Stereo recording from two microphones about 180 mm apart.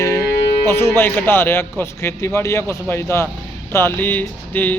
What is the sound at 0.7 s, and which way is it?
Speech, 15° left (ahead or behind).